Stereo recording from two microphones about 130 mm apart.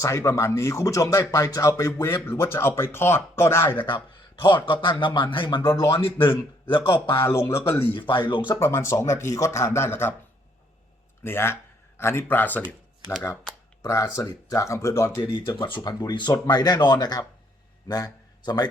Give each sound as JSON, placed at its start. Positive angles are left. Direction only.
{"t": 0.0, "sound": "speech", "side_deg": 25}
{"t": 3.8, "sound": "a man's voice", "side_deg": 40}
{"t": 7.3, "sound": "speech", "side_deg": 20}
{"t": 7.9, "sound": "a man's voice", "side_deg": 40}
{"t": 8.5, "sound": "speech", "side_deg": 20}
{"t": 11.2, "sound": "speech", "side_deg": 20}
{"t": 15.6, "sound": "a man's voice", "side_deg": 35}